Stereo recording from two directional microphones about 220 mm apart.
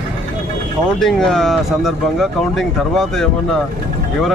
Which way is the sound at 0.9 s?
Centre (ahead or behind).